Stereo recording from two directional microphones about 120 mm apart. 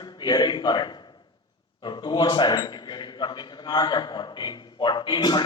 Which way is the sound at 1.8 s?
40° left (ahead or behind).